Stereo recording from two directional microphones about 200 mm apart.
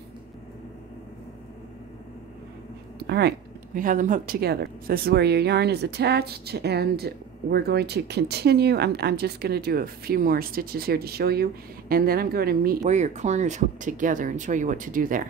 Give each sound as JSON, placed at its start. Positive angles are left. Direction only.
{"t": 3.0, "sound": "speech", "side_deg": -55}
{"t": 12.8, "sound": "speech", "side_deg": -35}